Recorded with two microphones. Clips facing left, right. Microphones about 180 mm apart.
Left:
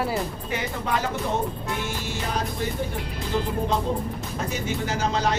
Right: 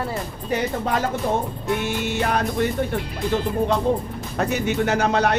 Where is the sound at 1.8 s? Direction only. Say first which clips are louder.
Right 7 dB; 65° right (ahead or behind).